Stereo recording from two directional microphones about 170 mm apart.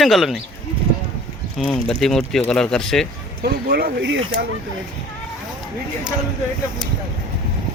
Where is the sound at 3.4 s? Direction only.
70° right (ahead or behind); by 4.2 s 90° right.